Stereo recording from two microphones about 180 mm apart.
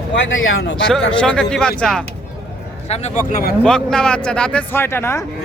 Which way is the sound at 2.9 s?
35° left (ahead or behind).